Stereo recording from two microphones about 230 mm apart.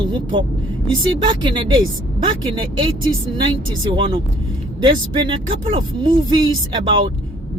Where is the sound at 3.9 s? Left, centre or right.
Right.